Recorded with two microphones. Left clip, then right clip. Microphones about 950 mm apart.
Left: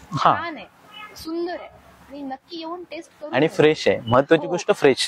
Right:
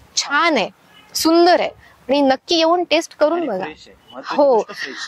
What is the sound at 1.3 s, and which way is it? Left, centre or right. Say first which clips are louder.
A woman's voice: right 16 dB; right.